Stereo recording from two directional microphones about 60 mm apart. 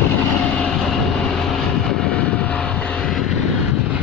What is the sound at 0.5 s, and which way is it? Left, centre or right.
Vehicle, centre.